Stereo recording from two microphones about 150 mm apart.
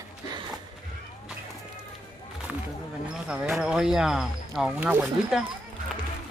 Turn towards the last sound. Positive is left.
turn(degrees=-5)  # may be behind; listen again after turning